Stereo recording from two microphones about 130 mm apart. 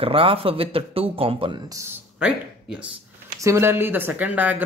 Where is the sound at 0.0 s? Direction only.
45° right (ahead or behind).